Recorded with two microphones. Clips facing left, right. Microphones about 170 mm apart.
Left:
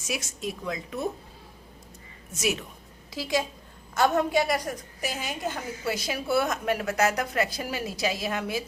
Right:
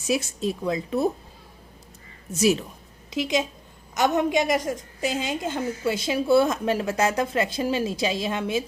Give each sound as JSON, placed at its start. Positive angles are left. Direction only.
{"t": 0.1, "sound": "a woman's voice", "side_deg": -30}
{"t": 2.3, "sound": "a woman's voice", "side_deg": -35}
{"t": 3.1, "sound": "a woman's voice", "side_deg": -20}